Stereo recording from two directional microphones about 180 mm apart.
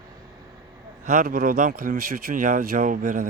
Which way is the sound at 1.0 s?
50° right (ahead or behind).